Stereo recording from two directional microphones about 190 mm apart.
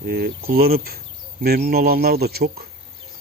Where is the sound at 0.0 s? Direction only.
55° right (ahead or behind).